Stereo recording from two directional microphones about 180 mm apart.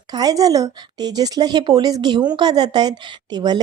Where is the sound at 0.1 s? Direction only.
20° right (ahead or behind).